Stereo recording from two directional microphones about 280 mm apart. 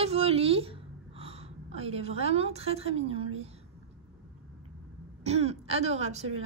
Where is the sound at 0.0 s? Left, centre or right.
Right.